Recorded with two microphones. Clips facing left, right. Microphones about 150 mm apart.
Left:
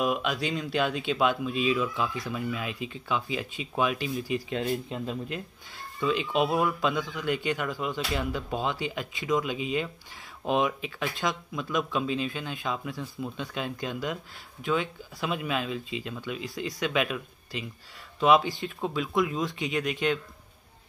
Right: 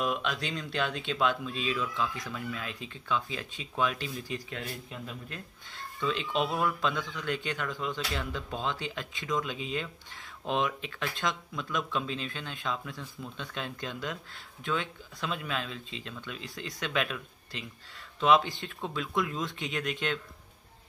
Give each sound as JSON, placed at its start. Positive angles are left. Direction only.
{"t": 0.0, "sound": "speech", "side_deg": 5}
{"t": 4.5, "sound": "speech", "side_deg": 20}
{"t": 5.9, "sound": "speech", "side_deg": 5}